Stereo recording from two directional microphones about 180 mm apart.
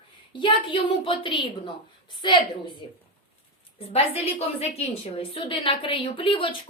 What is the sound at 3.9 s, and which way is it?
A woman's voice, 35° left (ahead or behind).